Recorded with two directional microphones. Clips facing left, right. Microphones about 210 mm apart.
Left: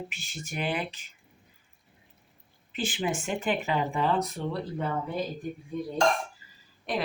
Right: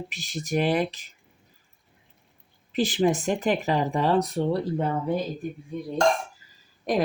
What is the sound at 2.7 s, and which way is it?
Speech, 40° right (ahead or behind).